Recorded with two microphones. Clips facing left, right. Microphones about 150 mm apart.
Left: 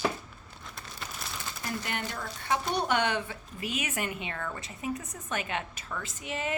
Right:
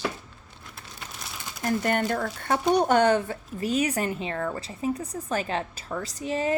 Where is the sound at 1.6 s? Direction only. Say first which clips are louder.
Right 11 dB; 45° right (ahead or behind).